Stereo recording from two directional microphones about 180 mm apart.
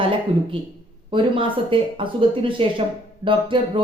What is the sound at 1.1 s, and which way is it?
A woman's voice, 30° right (ahead or behind).